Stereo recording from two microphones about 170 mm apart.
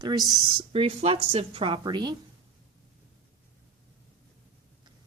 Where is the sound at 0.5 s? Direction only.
35° right (ahead or behind).